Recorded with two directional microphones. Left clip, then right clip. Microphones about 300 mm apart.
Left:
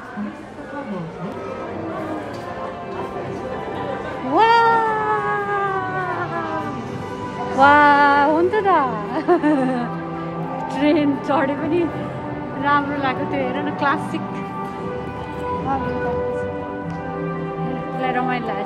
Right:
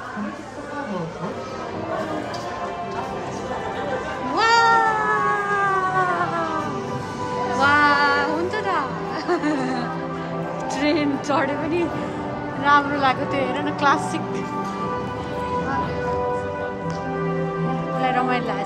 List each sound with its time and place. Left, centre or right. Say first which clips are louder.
4.4 s cat: left 2 dB; centre
7.5 s a sound: left 5 dB; centre
10.8 s music: left 4 dB; centre
12.6 s a woman's voice: right 2 dB; centre
18.0 s speech: even; centre